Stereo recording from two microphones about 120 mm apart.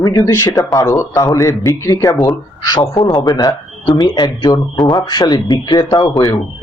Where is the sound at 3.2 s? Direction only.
35° left (ahead or behind).